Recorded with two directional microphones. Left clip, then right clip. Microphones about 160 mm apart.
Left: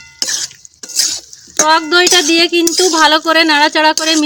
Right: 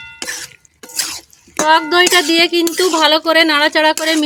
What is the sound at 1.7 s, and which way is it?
Speech, 35° left (ahead or behind).